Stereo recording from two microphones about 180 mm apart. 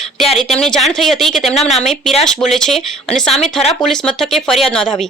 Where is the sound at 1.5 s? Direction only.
35° left (ahead or behind).